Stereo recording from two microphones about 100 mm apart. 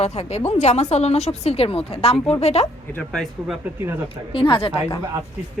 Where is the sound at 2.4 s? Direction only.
90° left.